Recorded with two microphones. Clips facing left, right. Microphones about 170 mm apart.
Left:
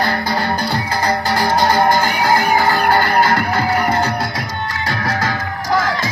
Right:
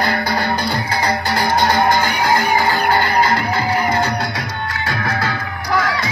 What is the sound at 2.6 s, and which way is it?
Music, 45° left (ahead or behind).